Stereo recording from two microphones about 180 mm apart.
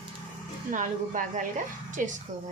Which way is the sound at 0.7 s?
45° right (ahead or behind).